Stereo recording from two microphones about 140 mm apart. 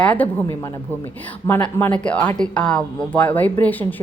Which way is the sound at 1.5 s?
15° left (ahead or behind).